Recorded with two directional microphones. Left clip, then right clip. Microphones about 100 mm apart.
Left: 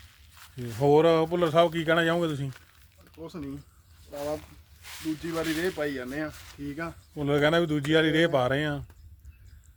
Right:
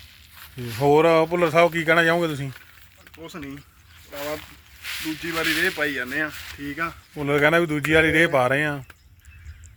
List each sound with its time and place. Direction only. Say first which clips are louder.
0.8 s speech: right 4 dB; 65° right (ahead or behind)
3.2 s speech: right 3 dB; 25° left (ahead or behind)
4.1 s speech: right 2 dB; 15° left (ahead or behind)
4.8 s snake: right 5 dB; 35° left (ahead or behind)
5.2 s speech: right 8 dB; 25° left (ahead or behind)
7.2 s speech: right 5 dB; 70° right (ahead or behind)